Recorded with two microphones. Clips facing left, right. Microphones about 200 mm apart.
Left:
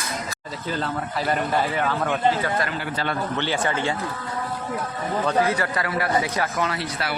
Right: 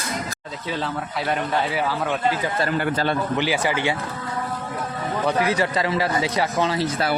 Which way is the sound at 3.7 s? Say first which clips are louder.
Right 2 dB; 75° right (ahead or behind).